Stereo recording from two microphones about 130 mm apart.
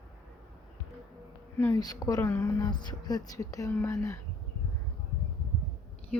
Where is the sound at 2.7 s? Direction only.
35° left (ahead or behind).